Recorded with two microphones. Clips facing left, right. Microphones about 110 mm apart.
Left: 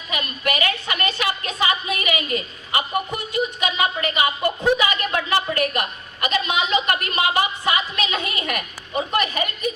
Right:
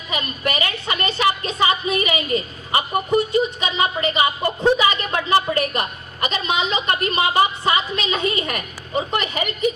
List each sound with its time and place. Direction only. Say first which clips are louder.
0.1 s a woman's voice: right 1 dB; 30° right (ahead or behind)